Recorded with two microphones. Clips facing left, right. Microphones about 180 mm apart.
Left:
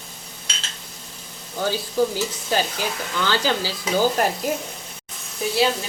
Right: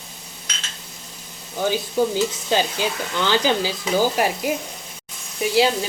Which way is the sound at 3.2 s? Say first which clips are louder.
Right 3 dB; 15° right (ahead or behind).